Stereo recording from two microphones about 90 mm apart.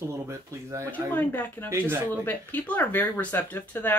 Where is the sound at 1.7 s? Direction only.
25° right (ahead or behind).